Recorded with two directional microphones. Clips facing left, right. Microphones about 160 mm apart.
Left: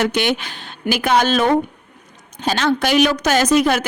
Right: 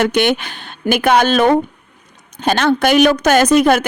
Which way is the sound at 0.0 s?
55° right (ahead or behind).